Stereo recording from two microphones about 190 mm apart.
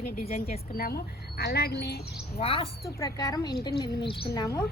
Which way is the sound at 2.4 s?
30° left (ahead or behind).